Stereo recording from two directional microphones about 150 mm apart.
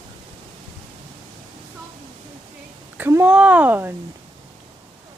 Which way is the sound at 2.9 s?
10° right (ahead or behind).